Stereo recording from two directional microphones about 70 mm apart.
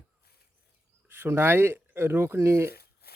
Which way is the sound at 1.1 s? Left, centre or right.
Right.